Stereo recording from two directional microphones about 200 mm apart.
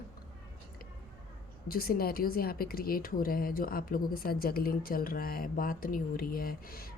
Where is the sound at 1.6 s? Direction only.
50° left (ahead or behind).